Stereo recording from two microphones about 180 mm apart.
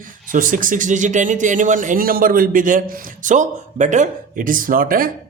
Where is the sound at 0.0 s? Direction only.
50° right (ahead or behind).